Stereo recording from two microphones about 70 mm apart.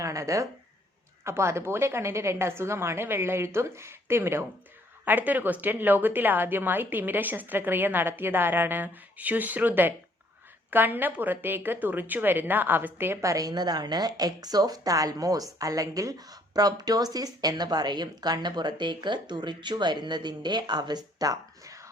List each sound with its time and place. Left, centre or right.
0.0 s a woman's voice: right
5.0 s a woman's voice: right
13.2 s a woman's voice: right